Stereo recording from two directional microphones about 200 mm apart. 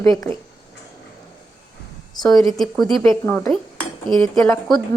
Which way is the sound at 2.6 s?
Centre (ahead or behind).